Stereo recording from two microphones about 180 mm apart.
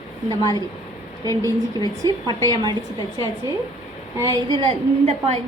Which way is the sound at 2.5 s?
25° right (ahead or behind).